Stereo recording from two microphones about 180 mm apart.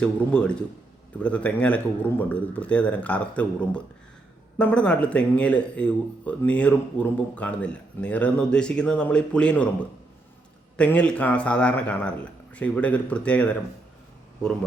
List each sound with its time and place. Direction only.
0.0 s speech: 5° left (ahead or behind)
10.8 s speech: 5° left (ahead or behind)